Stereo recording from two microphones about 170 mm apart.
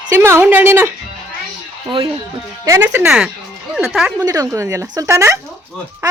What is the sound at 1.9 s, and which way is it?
Speech, 30° right (ahead or behind).